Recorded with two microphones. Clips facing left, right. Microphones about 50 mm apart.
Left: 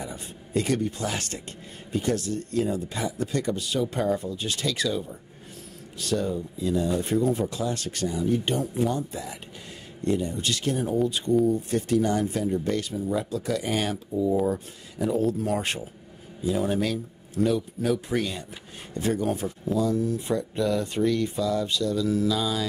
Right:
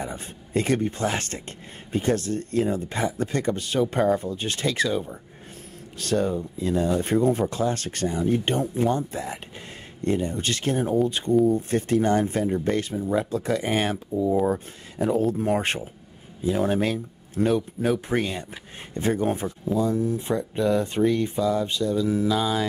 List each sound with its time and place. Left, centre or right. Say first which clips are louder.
0.0 s speech: right 3 dB; right
5.9 s speech: right 3 dB; right
19.7 s speech: right 1 dB; right